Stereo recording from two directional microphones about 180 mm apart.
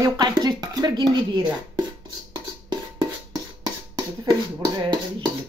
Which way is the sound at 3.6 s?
20° right (ahead or behind).